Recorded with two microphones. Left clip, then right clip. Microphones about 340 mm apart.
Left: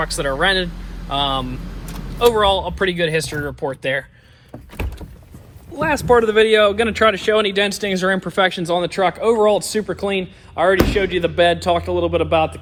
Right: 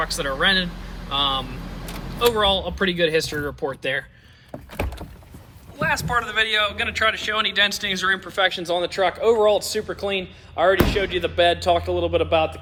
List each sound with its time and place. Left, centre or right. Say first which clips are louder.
0.1 s speech: left 3 dB; centre
5.8 s speech: left 7 dB; centre